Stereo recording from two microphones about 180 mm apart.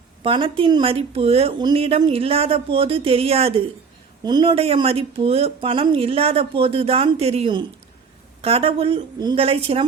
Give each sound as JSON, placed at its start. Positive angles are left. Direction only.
{"t": 0.2, "sound": "speech", "side_deg": -30}